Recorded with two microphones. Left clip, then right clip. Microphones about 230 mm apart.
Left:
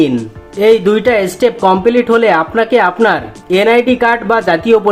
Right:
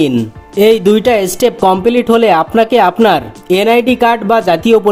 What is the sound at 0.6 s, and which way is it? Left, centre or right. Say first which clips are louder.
Speech: right 1 dB; right.